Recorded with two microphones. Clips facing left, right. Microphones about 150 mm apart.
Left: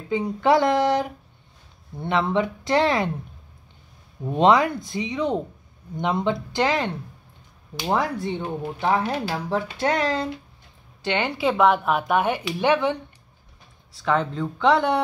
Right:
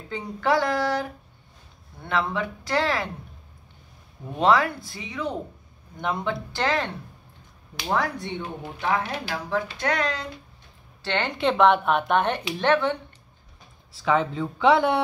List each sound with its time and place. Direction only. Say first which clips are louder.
0.1 s speech: left 5 dB; 20° left (ahead or behind)
4.4 s speech: left 3 dB; 20° left (ahead or behind)
7.9 s speech: left 2 dB; 25° left (ahead or behind)
11.0 s speech: left 2 dB; 15° left (ahead or behind)
13.9 s speech: even; 5° right (ahead or behind)